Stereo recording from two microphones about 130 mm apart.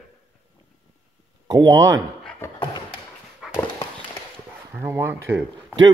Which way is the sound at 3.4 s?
5° right (ahead or behind).